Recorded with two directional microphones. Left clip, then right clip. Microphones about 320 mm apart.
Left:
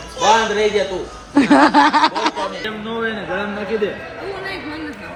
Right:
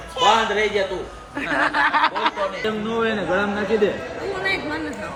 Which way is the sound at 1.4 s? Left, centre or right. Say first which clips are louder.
Left 8 dB; left.